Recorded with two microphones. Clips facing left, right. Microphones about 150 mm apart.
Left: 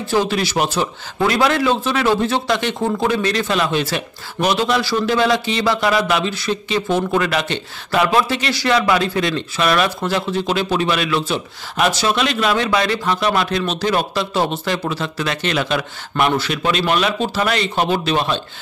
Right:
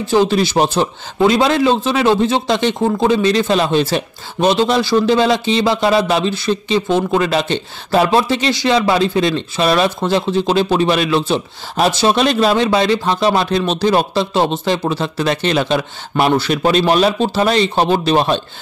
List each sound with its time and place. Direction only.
0.0 s a man's voice: 20° right (ahead or behind); by 18.4 s 35° right (ahead or behind)